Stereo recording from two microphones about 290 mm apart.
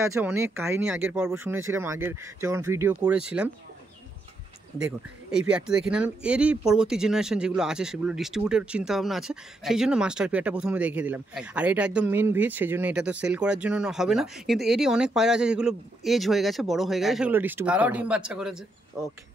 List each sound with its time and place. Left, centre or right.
0.0 s speech: centre
4.8 s speech: centre